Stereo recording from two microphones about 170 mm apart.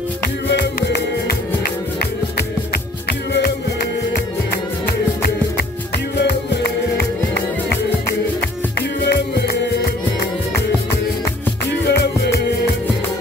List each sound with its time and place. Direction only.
0.5 s music: 85° left; by 3.5 s 65° left (ahead or behind)
4.8 s music: 60° left (ahead or behind)
6.1 s music: 75° left (ahead or behind)
11.9 s music: 75° left (ahead or behind)